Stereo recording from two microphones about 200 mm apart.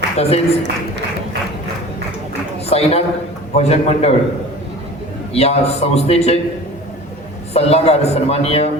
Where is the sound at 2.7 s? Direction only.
30° left (ahead or behind).